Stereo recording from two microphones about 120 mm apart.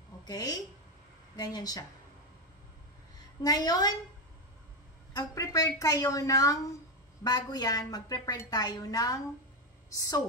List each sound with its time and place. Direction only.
0.2 s a woman's voice: 35° left (ahead or behind)
3.2 s a woman's voice: 35° left (ahead or behind)
5.1 s a woman's voice: 30° left (ahead or behind)